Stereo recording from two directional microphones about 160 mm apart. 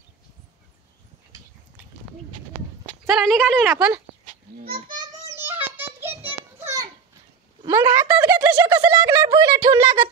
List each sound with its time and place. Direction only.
3.1 s speech: centre (ahead or behind)
4.8 s child singing: 25° right (ahead or behind)
5.4 s a sound: 10° right (ahead or behind)
7.6 s speech: 20° right (ahead or behind)
8.6 s speech: 25° right (ahead or behind)